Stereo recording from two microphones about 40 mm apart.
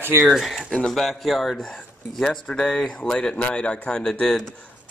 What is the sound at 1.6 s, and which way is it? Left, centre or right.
Speech, centre.